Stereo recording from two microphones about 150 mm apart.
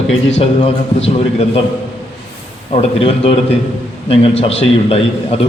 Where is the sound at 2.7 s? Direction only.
40° left (ahead or behind).